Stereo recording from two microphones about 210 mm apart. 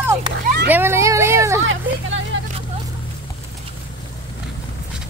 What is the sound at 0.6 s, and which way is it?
Vehicle, 10° right (ahead or behind).